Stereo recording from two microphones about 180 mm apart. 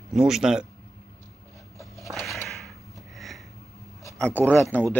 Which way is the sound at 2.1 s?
Centre (ahead or behind).